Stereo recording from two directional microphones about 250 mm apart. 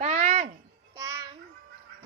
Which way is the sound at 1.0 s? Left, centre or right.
Centre.